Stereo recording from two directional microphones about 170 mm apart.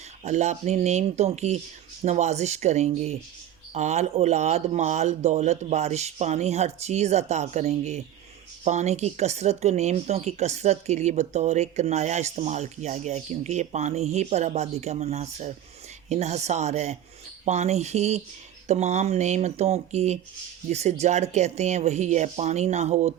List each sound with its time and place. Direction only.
0.3 s speech: 45° right (ahead or behind)